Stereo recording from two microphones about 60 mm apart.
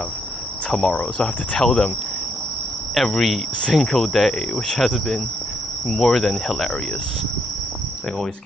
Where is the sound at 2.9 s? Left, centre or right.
Centre.